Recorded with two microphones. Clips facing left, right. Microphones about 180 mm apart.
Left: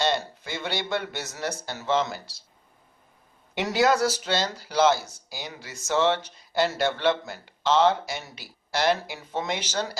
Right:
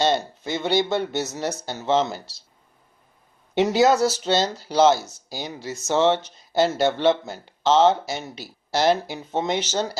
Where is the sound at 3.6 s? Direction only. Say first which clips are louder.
Right 3 dB; 25° right (ahead or behind).